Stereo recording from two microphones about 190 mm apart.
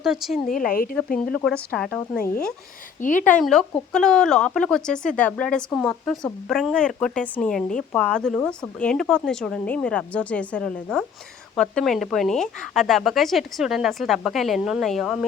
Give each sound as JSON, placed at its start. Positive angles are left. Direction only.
{"t": 0.0, "sound": "speech", "side_deg": 0}
{"t": 0.4, "sound": "speech", "side_deg": 45}
{"t": 0.9, "sound": "speech", "side_deg": 5}
{"t": 3.0, "sound": "speech", "side_deg": 45}
{"t": 3.2, "sound": "speech", "side_deg": 5}